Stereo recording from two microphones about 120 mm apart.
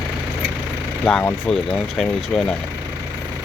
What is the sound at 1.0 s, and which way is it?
Speech, 10° left (ahead or behind).